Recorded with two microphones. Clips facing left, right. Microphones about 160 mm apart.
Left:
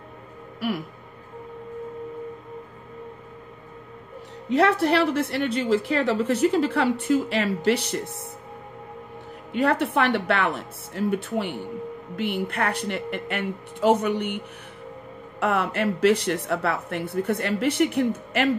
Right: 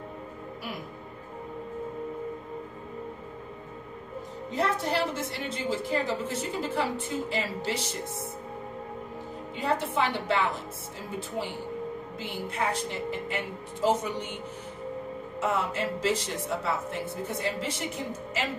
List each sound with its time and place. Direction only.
0.6 s speech: 70° left (ahead or behind)
4.5 s a woman's voice: 70° left (ahead or behind)
9.5 s speech: 65° left (ahead or behind)
15.4 s speech: 65° left (ahead or behind)